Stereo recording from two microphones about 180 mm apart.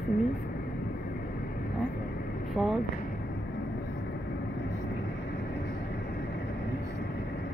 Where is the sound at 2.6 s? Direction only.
Centre (ahead or behind).